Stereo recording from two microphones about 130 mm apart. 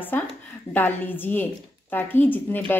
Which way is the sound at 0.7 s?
15° left (ahead or behind).